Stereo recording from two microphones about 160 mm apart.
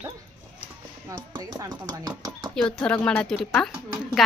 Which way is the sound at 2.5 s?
5° left (ahead or behind).